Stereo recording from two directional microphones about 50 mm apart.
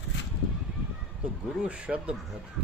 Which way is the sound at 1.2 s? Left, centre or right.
Right.